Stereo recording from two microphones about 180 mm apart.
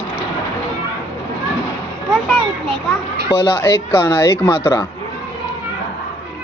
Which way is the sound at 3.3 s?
15° left (ahead or behind).